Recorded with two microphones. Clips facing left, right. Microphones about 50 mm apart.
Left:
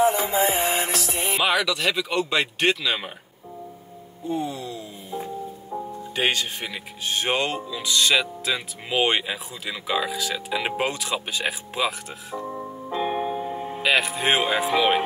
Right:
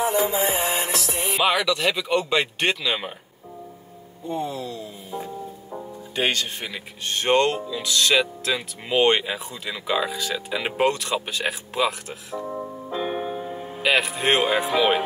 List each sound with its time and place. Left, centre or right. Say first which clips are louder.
0.0 s music: left 2 dB; left
1.4 s speech: right 2 dB; centre
4.3 s speech: even; centre
13.8 s speech: right 1 dB; centre